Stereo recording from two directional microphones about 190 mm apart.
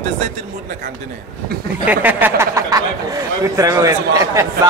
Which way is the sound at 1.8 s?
10° right (ahead or behind).